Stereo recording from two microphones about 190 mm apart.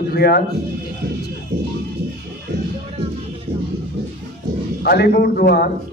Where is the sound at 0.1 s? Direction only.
55° left (ahead or behind).